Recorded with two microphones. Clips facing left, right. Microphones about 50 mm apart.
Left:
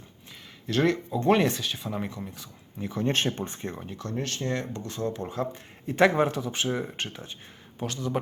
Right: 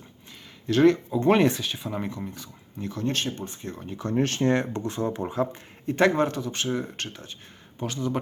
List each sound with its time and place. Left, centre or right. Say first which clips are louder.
0.7 s speech: right 5 dB; centre
3.1 s speech: left 3 dB; left
4.1 s speech: right 8 dB; right; by 5.5 s centre
5.8 s speech: even; centre
7.8 s speech: right 1 dB; centre